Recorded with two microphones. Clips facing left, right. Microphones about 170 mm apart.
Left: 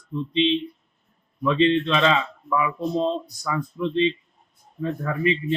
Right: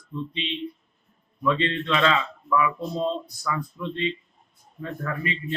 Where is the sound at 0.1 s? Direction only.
25° left (ahead or behind).